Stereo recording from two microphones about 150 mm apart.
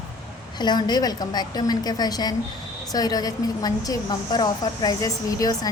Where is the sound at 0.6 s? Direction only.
30° left (ahead or behind).